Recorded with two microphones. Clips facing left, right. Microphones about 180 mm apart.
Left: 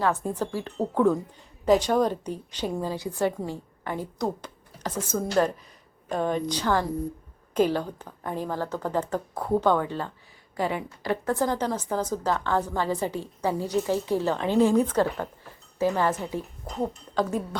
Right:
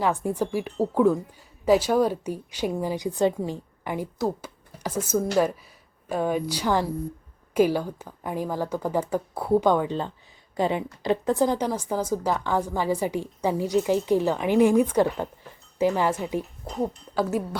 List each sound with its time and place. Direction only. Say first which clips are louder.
0.0 s a woman's voice: right 2 dB; 15° right (ahead or behind)